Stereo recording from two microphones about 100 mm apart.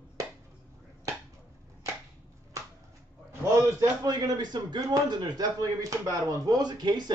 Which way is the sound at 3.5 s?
40° right (ahead or behind).